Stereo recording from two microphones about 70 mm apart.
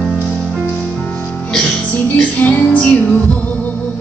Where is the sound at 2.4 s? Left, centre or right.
Left.